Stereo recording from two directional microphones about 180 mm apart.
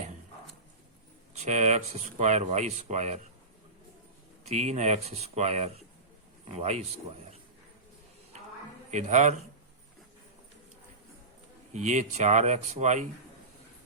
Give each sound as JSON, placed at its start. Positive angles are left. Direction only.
{"t": 1.4, "sound": "speech", "side_deg": -40}
{"t": 4.4, "sound": "speech", "side_deg": -40}
{"t": 8.9, "sound": "speech", "side_deg": -40}
{"t": 11.7, "sound": "speech", "side_deg": -40}